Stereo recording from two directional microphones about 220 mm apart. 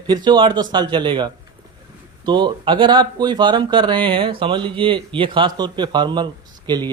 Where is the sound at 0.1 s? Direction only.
20° right (ahead or behind).